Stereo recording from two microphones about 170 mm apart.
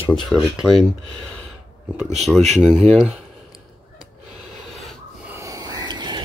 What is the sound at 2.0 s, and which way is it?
Speech, centre (ahead or behind).